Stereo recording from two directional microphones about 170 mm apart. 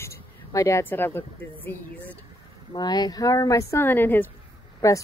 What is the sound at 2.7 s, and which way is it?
A woman's voice, 25° left (ahead or behind).